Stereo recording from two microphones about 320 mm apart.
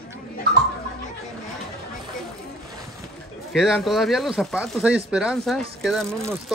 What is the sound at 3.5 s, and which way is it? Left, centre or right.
Speech, centre.